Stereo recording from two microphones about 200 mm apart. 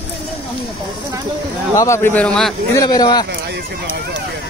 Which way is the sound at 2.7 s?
20° left (ahead or behind).